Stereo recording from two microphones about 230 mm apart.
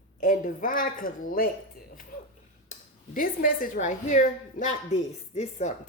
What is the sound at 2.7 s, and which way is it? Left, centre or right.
Speech, left.